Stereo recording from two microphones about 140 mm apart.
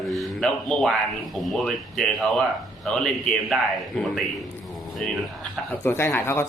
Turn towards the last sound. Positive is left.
turn(degrees=15)  # may be behind; listen again after turning